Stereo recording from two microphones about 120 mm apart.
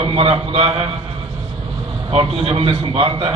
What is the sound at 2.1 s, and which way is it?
A man's voice, 55° right (ahead or behind).